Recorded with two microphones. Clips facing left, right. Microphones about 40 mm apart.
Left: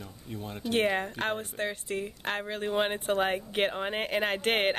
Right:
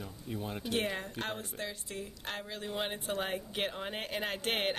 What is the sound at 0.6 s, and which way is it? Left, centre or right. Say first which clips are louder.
Speech: left 8 dB; left.